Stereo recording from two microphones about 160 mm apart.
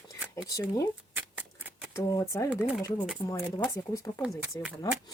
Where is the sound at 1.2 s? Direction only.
10° right (ahead or behind).